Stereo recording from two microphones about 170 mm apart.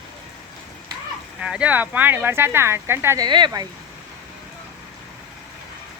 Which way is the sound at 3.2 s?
25° right (ahead or behind).